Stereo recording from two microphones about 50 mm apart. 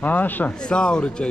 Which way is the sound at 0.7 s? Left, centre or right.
Centre.